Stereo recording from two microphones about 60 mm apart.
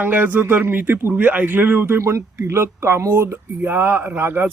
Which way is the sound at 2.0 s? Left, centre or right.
Right.